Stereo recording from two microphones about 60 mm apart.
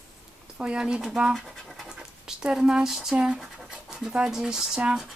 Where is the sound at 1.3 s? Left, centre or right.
Centre.